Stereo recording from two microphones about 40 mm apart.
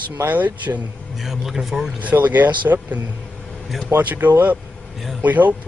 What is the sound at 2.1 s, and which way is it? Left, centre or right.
Speech, right.